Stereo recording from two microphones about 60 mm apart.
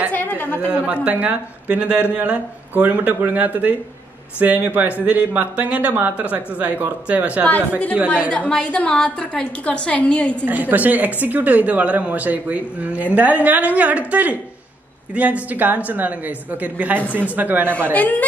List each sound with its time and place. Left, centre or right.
0.1 s a sound: left
0.7 s speech: right
8.3 s a woman's voice: centre
10.4 s speech: right
17.9 s a woman's voice: left